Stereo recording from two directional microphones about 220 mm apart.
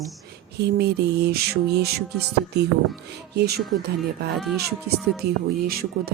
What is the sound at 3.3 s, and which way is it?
Speech, 45° right (ahead or behind).